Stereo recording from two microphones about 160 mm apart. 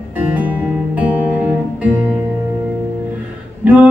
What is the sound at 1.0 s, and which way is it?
Music, 10° right (ahead or behind).